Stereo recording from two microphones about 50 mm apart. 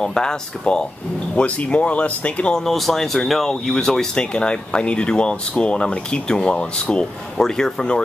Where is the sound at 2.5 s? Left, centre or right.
Centre; by 7.0 s left.